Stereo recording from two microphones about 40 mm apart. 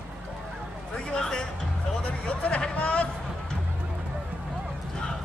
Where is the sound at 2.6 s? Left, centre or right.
Left.